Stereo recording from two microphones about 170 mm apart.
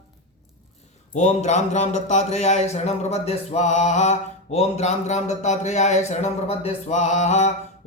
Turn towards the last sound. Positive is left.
turn(degrees=40)  # may be behind; listen again after turning